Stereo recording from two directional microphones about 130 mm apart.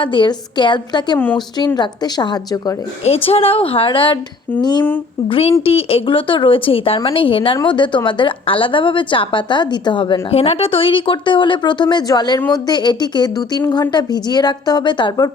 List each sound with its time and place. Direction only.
0.0 s a woman's voice: 40° left (ahead or behind)
3.2 s a woman's voice: 45° left (ahead or behind)
5.3 s a woman's voice: 45° left (ahead or behind)
10.3 s a woman's voice: 50° left (ahead or behind); by 15.3 s 35° left (ahead or behind)